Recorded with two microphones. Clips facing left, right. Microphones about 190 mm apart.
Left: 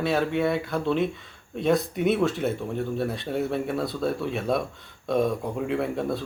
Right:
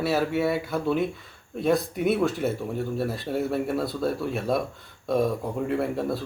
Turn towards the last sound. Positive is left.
turn(degrees=0)  # may be behind; listen again after turning